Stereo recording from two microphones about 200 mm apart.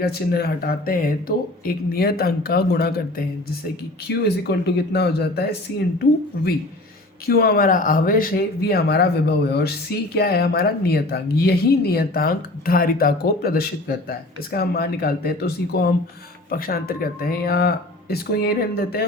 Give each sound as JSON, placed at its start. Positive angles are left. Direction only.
{"t": 0.0, "sound": "speech", "side_deg": 50}
{"t": 7.3, "sound": "speech", "side_deg": 50}